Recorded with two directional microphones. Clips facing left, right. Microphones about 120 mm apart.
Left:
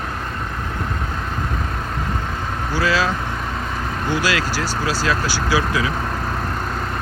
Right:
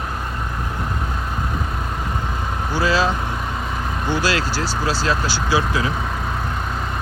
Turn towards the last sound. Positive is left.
turn(degrees=-25)  # may be behind; listen again after turning